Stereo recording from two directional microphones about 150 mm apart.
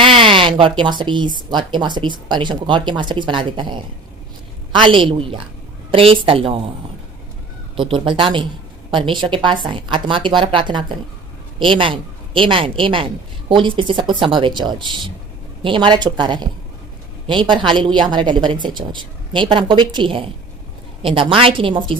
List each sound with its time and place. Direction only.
0.0 s speech: 35° right (ahead or behind)
7.8 s speech: 35° right (ahead or behind)